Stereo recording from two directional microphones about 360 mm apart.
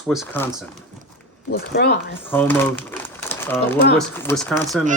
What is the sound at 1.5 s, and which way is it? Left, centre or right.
Speech, left.